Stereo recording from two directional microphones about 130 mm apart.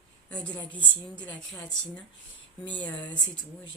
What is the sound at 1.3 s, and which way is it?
Speech, 10° left (ahead or behind).